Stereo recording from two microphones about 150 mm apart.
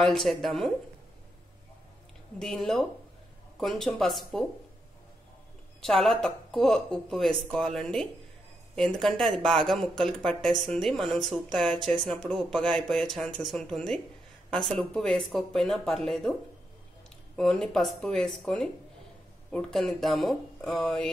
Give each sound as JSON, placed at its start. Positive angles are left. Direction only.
{"t": 0.0, "sound": "speech", "side_deg": 0}
{"t": 2.3, "sound": "speech", "side_deg": 0}
{"t": 5.8, "sound": "speech", "side_deg": 0}
{"t": 17.4, "sound": "speech", "side_deg": 5}